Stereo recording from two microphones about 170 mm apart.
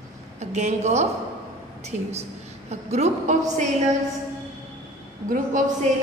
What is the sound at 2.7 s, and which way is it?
A woman's voice, 40° right (ahead or behind).